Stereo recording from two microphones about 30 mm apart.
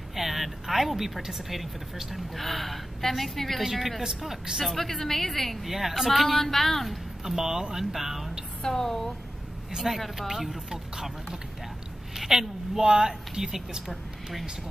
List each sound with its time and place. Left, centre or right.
0.1 s a sound: centre
1.5 s a woman's voice: centre
5.7 s a woman's voice: centre
6.2 s a woman's voice: centre
7.2 s a woman's voice: centre
8.6 s a woman's voice: centre
12.2 s a woman's voice: centre